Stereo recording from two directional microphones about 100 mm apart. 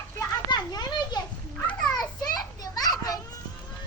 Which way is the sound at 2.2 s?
40° left (ahead or behind).